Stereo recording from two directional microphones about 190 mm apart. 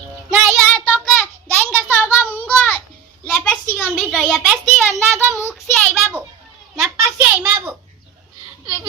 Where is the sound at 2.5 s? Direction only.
5° left (ahead or behind).